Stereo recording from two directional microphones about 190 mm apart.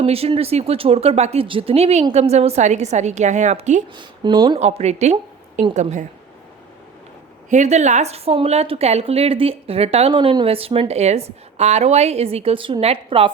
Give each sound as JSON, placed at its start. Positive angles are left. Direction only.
{"t": 0.0, "sound": "a woman's voice", "side_deg": -30}
{"t": 3.9, "sound": "a woman's voice", "side_deg": -25}
{"t": 7.5, "sound": "a woman's voice", "side_deg": -40}